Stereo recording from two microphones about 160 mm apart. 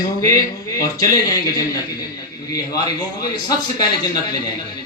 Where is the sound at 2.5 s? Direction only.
25° left (ahead or behind).